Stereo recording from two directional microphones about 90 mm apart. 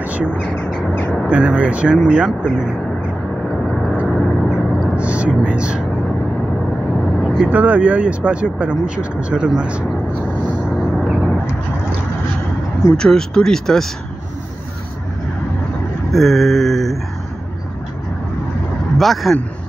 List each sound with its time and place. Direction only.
0.0 s bird: 15° right (ahead or behind)
0.3 s speech: 15° left (ahead or behind)
1.2 s speech: 15° right (ahead or behind)
3.6 s vehicle: centre (ahead or behind)
4.6 s a sound: centre (ahead or behind)
4.9 s a sound: 15° right (ahead or behind)
5.4 s speech: 15° right (ahead or behind)
7.2 s vehicle: centre (ahead or behind)
7.4 s speech: 15° right (ahead or behind)
10.8 s vehicle: 5° right (ahead or behind)
12.9 s speech: 5° left (ahead or behind)
16.1 s speech: centre (ahead or behind)
18.9 s speech: centre (ahead or behind)